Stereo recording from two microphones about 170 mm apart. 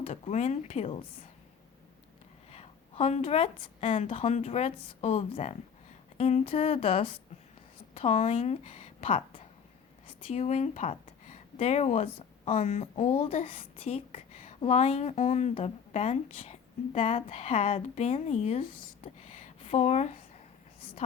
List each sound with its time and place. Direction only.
0.0 s speech: 40° left (ahead or behind)
2.5 s a sound: 35° left (ahead or behind)
3.8 s a woman's voice: 35° left (ahead or behind)